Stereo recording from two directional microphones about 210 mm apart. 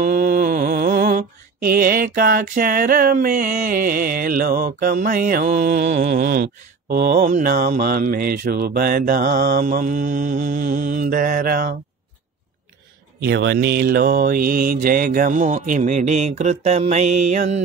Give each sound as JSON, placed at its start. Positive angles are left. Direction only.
{"t": 0.0, "sound": "mantra", "side_deg": -40}
{"t": 13.3, "sound": "mantra", "side_deg": -55}